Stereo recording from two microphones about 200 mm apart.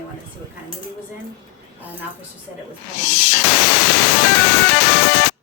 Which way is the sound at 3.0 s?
60° left (ahead or behind).